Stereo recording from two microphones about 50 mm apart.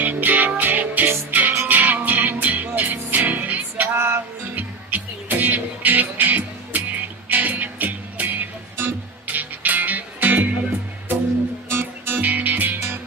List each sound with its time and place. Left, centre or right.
0.0 s music: right
3.8 s music: right
11.7 s music: right
12.2 s music: right